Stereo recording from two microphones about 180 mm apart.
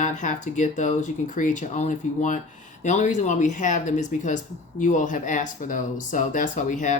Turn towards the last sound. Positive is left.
turn(degrees=45)  # may be behind; listen again after turning